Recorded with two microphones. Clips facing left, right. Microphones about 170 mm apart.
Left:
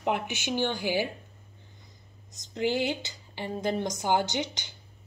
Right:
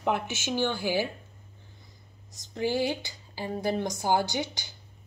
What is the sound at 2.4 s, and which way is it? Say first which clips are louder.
A woman's voice: even; 20° left (ahead or behind).